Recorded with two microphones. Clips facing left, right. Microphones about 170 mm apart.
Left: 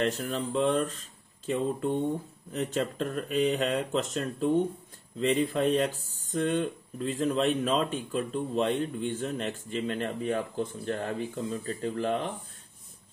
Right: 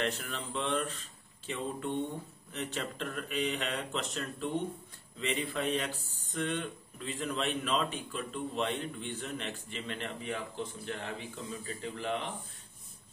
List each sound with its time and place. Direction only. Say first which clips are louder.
0.0 s speech: left 6 dB; 40° left (ahead or behind)